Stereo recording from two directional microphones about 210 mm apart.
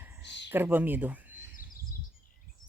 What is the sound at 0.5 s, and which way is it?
Speech, 10° right (ahead or behind).